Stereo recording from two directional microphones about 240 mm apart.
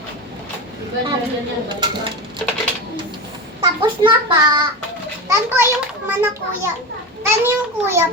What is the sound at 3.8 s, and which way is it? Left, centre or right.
A child's voice, right.